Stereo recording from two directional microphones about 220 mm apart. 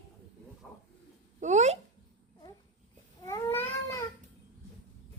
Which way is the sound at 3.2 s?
15° left (ahead or behind).